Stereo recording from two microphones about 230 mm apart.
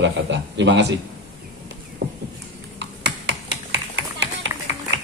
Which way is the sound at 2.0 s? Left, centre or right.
Right.